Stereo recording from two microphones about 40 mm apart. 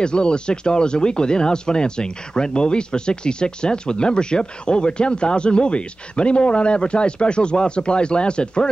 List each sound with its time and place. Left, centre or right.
0.0 s speech: left